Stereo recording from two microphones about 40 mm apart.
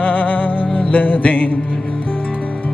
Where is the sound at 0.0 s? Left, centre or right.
Left.